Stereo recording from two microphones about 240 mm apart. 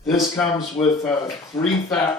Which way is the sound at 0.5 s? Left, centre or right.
Centre.